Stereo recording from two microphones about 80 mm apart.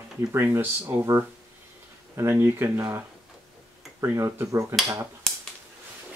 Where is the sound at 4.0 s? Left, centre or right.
Right.